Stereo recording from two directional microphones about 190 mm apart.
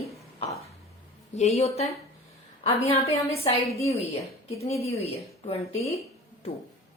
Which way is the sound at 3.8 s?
35° left (ahead or behind).